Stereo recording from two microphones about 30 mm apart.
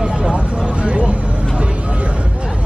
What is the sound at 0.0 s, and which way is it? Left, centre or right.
Vehicle, right.